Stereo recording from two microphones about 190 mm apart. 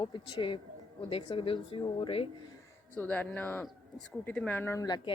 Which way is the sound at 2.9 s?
10° left (ahead or behind).